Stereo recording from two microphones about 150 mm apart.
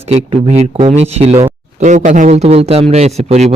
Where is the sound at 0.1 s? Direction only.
45° right (ahead or behind).